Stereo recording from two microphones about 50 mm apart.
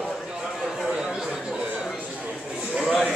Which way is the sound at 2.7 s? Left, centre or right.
Centre.